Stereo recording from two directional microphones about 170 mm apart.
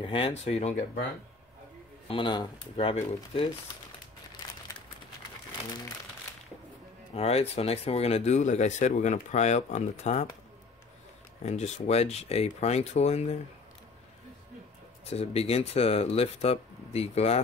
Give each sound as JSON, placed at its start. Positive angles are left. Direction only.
{"t": 0.0, "sound": "speech", "side_deg": 30}
{"t": 2.0, "sound": "speech", "side_deg": 30}
{"t": 7.2, "sound": "speech", "side_deg": 35}
{"t": 11.4, "sound": "speech", "side_deg": 40}
{"t": 15.0, "sound": "speech", "side_deg": 35}